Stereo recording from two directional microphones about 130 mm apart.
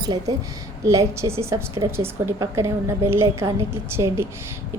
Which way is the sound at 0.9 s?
25° right (ahead or behind).